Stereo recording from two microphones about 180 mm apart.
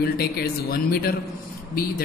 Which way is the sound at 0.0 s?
60° left (ahead or behind).